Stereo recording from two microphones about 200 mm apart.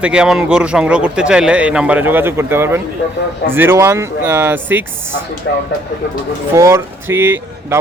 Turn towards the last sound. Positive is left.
turn(degrees=-10)  # may be behind; listen again after turning